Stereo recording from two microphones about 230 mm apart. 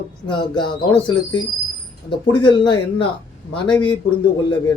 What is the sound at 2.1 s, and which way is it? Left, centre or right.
Speech, left.